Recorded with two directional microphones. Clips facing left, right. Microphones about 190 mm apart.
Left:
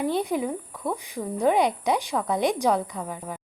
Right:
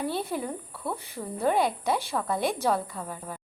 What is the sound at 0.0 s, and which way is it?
A woman's voice, 15° left (ahead or behind).